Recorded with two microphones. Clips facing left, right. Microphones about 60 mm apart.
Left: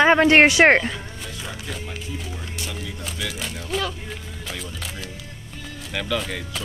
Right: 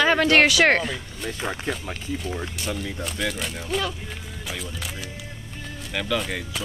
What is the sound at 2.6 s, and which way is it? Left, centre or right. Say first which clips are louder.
Speech: right 3 dB; centre.